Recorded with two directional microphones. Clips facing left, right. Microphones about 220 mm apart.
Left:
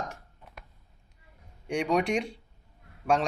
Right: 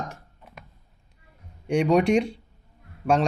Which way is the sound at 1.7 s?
30° right (ahead or behind).